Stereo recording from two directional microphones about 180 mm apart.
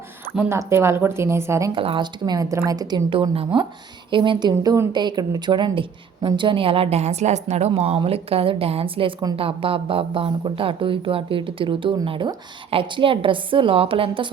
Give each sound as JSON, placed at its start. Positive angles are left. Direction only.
{"t": 0.3, "sound": "speech", "side_deg": -15}
{"t": 1.7, "sound": "speech", "side_deg": -30}